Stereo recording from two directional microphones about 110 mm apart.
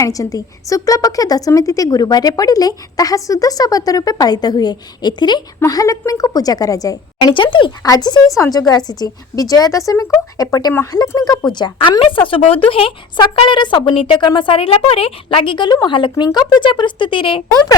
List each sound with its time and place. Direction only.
0.0 s a woman's voice: 30° left (ahead or behind)
5.5 s a woman's voice: 30° left (ahead or behind); by 7.7 s 50° left (ahead or behind)
7.8 s a woman's voice: 35° left (ahead or behind)
11.5 s a woman's voice: 45° left (ahead or behind)